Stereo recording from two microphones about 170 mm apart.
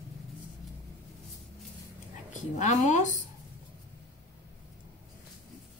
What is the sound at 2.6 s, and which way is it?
Speech, 45° left (ahead or behind).